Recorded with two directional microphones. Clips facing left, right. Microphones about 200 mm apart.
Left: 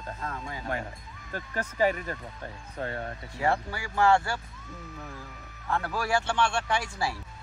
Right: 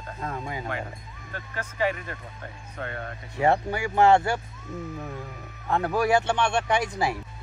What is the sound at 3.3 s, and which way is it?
Speech, 20° right (ahead or behind).